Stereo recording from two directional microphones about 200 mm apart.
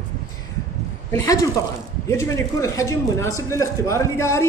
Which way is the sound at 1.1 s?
15° left (ahead or behind).